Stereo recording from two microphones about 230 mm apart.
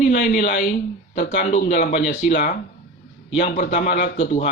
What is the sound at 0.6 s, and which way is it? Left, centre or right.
Speech, left.